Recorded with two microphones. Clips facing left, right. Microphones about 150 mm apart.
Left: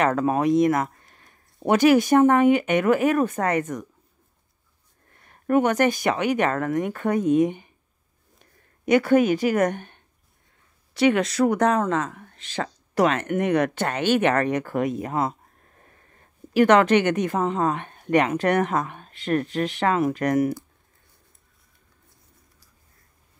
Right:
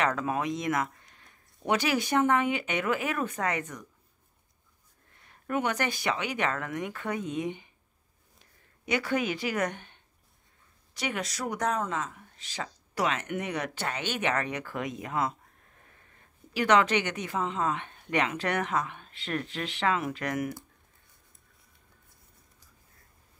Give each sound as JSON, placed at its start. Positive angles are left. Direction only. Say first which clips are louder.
{"t": 0.0, "sound": "a woman's voice", "louder": "left 8 dB", "side_deg": 40}
{"t": 1.0, "sound": "a sound", "louder": "left 3 dB", "side_deg": 45}
{"t": 1.7, "sound": "a woman's voice", "louder": "left 10 dB", "side_deg": 45}
{"t": 5.2, "sound": "a woman's voice", "louder": "left 10 dB", "side_deg": 50}
{"t": 11.0, "sound": "speech", "louder": "left 14 dB", "side_deg": 65}
{"t": 16.5, "sound": "a woman's voice", "louder": "left 8 dB", "side_deg": 50}